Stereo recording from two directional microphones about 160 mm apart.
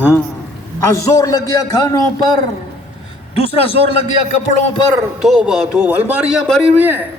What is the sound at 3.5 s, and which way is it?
Speech, 35° left (ahead or behind).